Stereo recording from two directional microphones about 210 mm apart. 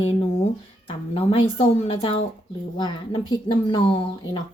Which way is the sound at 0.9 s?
25° left (ahead or behind).